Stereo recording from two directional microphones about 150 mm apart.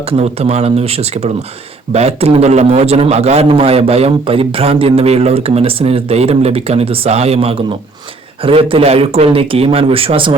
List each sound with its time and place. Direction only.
0.1 s a man's voice: 45° right (ahead or behind)